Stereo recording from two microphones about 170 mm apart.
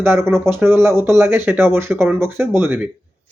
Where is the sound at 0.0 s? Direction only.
15° right (ahead or behind).